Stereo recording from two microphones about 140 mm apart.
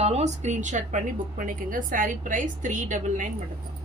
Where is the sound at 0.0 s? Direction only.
50° right (ahead or behind); by 3.2 s 65° right (ahead or behind).